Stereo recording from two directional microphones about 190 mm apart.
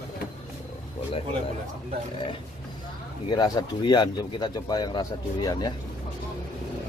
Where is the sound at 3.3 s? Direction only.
20° left (ahead or behind).